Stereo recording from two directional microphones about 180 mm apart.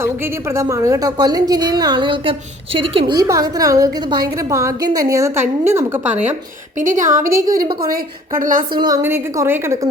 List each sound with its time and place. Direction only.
0.5 s a woman's voice: 15° right (ahead or behind)
6.7 s a woman's voice: 45° right (ahead or behind)
8.7 s a woman's voice: 25° right (ahead or behind)
9.0 s a woman's voice: 15° right (ahead or behind)